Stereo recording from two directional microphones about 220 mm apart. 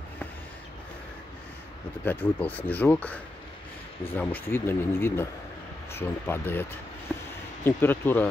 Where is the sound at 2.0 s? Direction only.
5° left (ahead or behind).